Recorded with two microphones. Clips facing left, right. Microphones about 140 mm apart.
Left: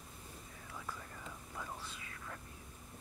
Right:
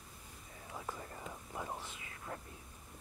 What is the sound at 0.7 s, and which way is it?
Whispering, 30° right (ahead or behind).